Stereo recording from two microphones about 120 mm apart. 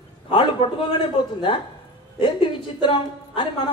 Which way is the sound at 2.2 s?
45° left (ahead or behind).